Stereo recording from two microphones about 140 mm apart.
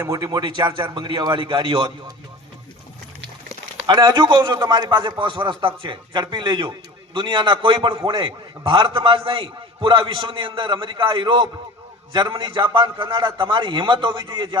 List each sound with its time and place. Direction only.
0.0 s a man's voice: 25° right (ahead or behind)
3.8 s a man's voice: 35° right (ahead or behind)